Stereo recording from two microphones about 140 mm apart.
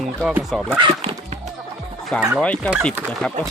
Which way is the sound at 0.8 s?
40° right (ahead or behind).